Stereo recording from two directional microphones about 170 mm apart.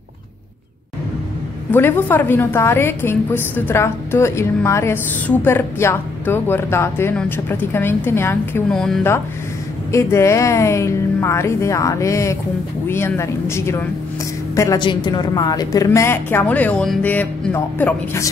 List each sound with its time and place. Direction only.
1.7 s a woman's voice: 10° left (ahead or behind)
8.7 s speech: centre (ahead or behind)
9.9 s a woman's voice: 15° left (ahead or behind)